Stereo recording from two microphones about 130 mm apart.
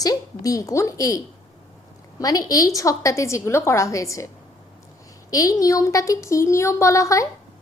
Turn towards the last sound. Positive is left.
turn(degrees=25)  # may be behind; listen again after turning